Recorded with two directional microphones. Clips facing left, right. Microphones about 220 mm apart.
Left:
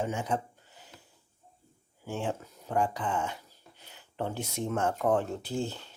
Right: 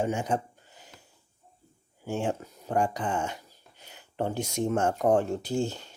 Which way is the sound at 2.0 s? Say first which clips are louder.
Right 4 dB; 15° right (ahead or behind).